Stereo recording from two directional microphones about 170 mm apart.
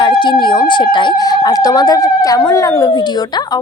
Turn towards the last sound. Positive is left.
turn(degrees=25)  # may be behind; listen again after turning